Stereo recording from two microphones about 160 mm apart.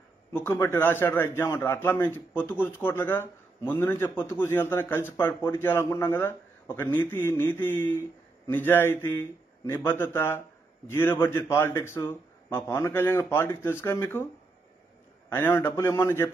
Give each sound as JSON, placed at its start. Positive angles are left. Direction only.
{"t": 0.3, "sound": "a man's voice", "side_deg": 15}
{"t": 15.2, "sound": "a man's voice", "side_deg": 15}